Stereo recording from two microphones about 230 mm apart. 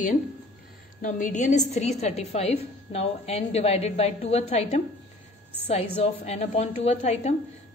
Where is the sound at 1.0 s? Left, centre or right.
Left.